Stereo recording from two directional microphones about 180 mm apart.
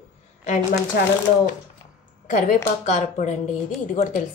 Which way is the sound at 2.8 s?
40° left (ahead or behind).